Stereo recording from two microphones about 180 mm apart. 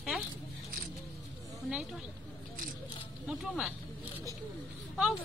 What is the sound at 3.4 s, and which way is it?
Speech, centre (ahead or behind).